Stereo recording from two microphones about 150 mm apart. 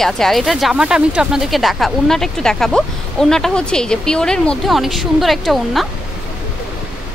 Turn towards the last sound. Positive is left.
turn(degrees=0)  # may be behind; listen again after turning